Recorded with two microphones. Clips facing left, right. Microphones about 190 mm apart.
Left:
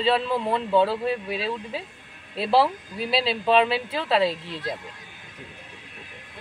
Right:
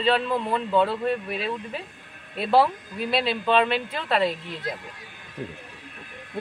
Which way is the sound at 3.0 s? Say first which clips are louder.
Even; 30° left (ahead or behind).